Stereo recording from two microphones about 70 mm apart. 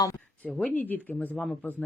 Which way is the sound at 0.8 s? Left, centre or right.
Left.